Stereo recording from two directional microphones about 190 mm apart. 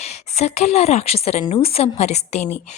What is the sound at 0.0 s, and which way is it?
Speech, 35° left (ahead or behind).